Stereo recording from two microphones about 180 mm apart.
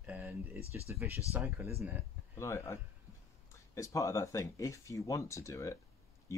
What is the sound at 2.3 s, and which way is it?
Speech, 15° left (ahead or behind).